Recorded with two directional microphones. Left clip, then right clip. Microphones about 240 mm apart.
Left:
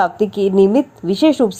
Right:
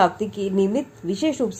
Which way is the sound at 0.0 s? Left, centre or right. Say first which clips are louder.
Left 5 dB; left.